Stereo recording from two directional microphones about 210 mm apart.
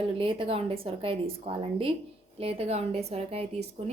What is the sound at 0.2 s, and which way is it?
A woman's voice, 25° right (ahead or behind).